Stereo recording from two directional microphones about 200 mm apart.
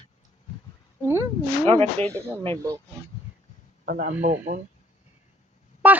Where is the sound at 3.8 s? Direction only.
45° right (ahead or behind).